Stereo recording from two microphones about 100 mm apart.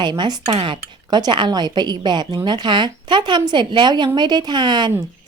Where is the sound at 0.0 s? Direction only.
50° right (ahead or behind).